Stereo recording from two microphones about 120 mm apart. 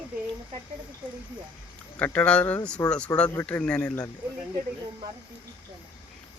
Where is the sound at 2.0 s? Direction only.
10° left (ahead or behind).